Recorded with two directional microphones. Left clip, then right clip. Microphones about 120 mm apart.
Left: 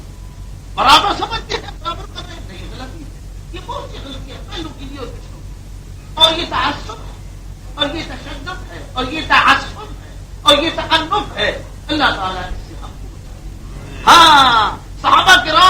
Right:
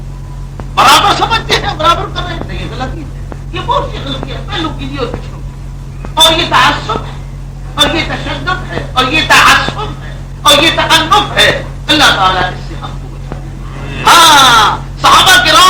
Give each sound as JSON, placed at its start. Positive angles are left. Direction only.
{"t": 0.8, "sound": "chuckle", "side_deg": 35}
{"t": 1.9, "sound": "a woman's voice", "side_deg": 25}
{"t": 6.2, "sound": "a man's voice", "side_deg": 35}
{"t": 13.7, "sound": "crow", "side_deg": 35}
{"t": 15.2, "sound": "speech", "side_deg": 25}